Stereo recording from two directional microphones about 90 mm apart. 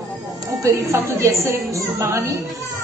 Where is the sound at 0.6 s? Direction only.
35° right (ahead or behind).